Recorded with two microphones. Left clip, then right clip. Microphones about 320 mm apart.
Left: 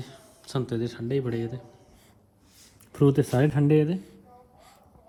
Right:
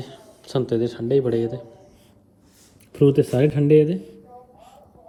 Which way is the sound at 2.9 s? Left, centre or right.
Centre.